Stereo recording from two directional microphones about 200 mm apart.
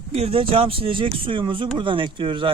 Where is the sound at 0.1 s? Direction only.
30° right (ahead or behind).